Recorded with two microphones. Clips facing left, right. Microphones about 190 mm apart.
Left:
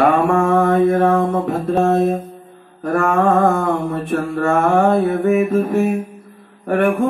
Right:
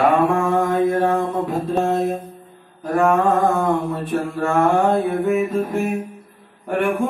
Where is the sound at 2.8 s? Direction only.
70° left (ahead or behind).